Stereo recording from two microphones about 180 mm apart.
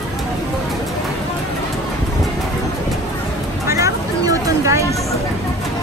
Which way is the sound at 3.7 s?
15° right (ahead or behind).